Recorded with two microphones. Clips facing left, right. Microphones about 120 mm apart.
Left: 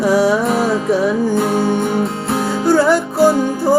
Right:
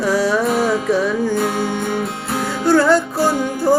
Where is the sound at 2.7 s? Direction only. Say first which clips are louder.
Even; 15° left (ahead or behind).